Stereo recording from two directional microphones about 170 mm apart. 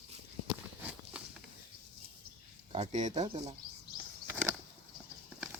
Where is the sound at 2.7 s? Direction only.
40° right (ahead or behind).